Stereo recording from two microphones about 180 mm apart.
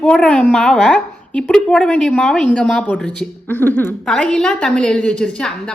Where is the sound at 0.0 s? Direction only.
5° left (ahead or behind).